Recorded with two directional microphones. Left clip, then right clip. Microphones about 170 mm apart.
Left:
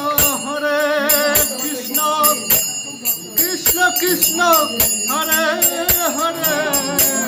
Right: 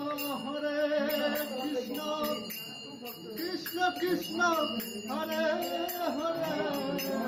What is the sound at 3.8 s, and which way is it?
Jingle bell, 20° right (ahead or behind).